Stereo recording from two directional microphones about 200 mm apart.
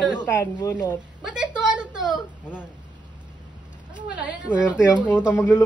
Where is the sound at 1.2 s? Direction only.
5° right (ahead or behind).